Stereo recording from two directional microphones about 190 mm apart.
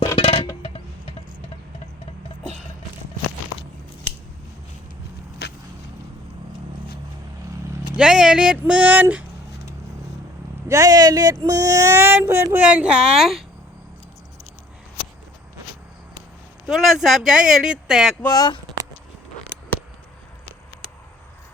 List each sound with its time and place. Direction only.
0.2 s music: 30° left (ahead or behind)
0.6 s a sound: 30° left (ahead or behind)
5.4 s vehicle: 60° left (ahead or behind)
7.9 s speech: 5° right (ahead or behind)
10.7 s speech: 20° right (ahead or behind); by 13.4 s centre (ahead or behind)
16.6 s speech: centre (ahead or behind)
18.2 s speech: 20° left (ahead or behind)